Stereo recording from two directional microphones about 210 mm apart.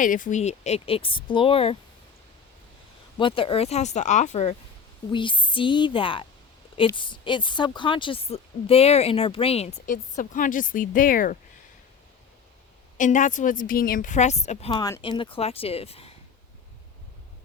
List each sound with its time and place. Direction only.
0.0 s a woman's voice: 40° left (ahead or behind)
3.2 s a woman's voice: 25° left (ahead or behind); by 11.3 s 40° left (ahead or behind)
13.0 s a woman's voice: 35° left (ahead or behind)